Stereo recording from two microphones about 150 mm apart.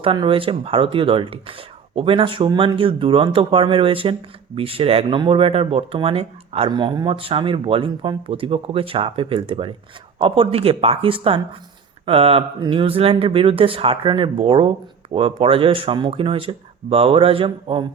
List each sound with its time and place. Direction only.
0.0 s speech: 35° right (ahead or behind)